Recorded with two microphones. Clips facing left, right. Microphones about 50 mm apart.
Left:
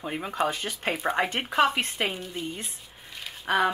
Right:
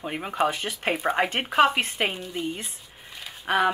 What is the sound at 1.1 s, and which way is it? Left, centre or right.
Speech, right.